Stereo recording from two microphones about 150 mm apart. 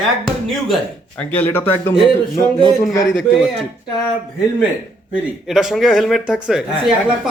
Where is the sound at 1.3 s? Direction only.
15° left (ahead or behind).